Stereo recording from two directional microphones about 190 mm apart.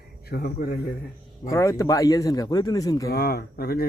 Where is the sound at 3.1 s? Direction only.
55° left (ahead or behind).